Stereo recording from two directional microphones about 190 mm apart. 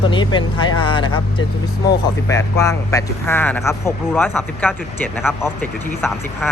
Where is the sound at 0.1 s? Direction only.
25° left (ahead or behind).